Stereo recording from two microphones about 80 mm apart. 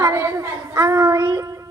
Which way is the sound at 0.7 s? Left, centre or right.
Right.